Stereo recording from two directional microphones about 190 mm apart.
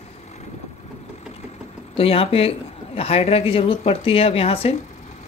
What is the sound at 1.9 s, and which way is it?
Speech, 30° left (ahead or behind).